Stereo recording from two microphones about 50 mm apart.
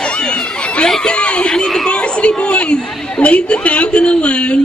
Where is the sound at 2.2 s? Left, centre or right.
Left.